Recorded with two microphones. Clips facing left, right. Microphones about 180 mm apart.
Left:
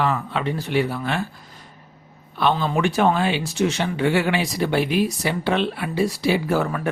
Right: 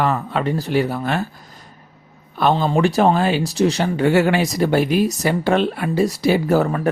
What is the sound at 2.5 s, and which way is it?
Speech, 35° right (ahead or behind).